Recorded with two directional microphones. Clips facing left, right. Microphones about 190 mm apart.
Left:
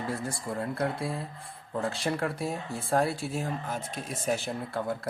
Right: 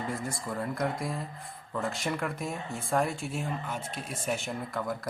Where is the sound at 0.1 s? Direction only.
30° left (ahead or behind).